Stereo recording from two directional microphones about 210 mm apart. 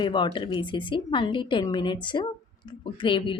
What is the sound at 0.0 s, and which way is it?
A woman's voice, 20° left (ahead or behind).